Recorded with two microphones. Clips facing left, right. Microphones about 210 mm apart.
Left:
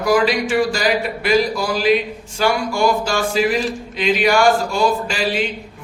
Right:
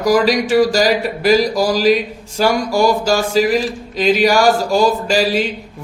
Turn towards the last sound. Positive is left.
turn(degrees=-40)  # may be behind; listen again after turning